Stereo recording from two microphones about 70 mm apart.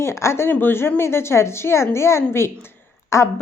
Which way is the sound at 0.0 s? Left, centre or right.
Left.